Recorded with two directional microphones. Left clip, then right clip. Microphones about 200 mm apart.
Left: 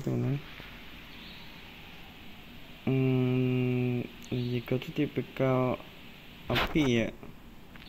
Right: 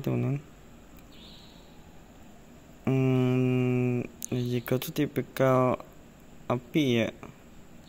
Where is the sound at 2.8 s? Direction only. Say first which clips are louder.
Right 2 dB; 10° right (ahead or behind).